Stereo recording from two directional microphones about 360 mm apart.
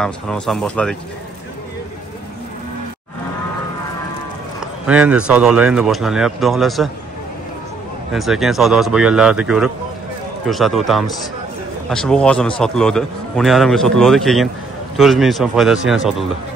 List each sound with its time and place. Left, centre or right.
0.0 s a man's voice: centre
4.8 s a man's voice: centre
8.1 s a man's voice: centre